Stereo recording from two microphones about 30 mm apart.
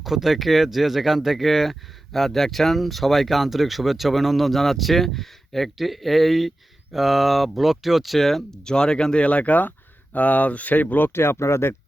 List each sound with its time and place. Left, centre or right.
0.0 s speech: centre
1.5 s speech: centre
8.6 s speech: left
9.1 s speech: left